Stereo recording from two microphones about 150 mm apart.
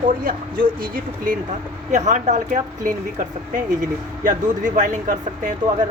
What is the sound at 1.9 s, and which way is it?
Speech, 55° right (ahead or behind).